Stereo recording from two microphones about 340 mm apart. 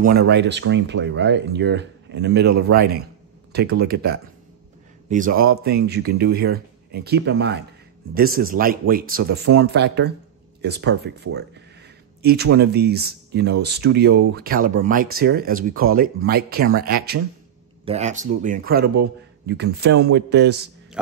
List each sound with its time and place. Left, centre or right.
0.2 s speech: right